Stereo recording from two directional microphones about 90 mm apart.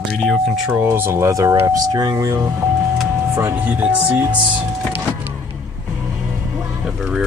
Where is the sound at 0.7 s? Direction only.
25° right (ahead or behind); by 2.4 s 40° right (ahead or behind).